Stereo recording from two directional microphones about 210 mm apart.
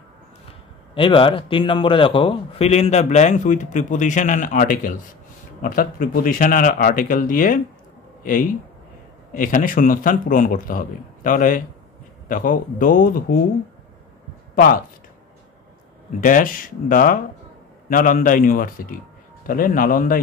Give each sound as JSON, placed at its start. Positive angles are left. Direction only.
{"t": 0.9, "sound": "a man's voice", "side_deg": 25}
{"t": 14.5, "sound": "speech", "side_deg": 45}
{"t": 16.2, "sound": "speech", "side_deg": 40}